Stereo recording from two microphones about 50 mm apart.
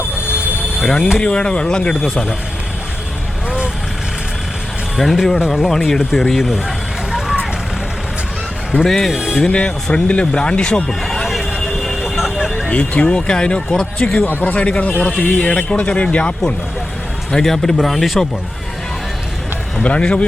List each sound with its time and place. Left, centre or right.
0.8 s speech: centre
4.9 s speech: centre
6.0 s speech: centre
6.2 s vehicle: centre
8.8 s speech: centre
9.1 s speech: centre
9.5 s speech: left
10.8 s a sound: centre
12.6 s speech: left
17.3 s speech: centre
19.8 s speech: left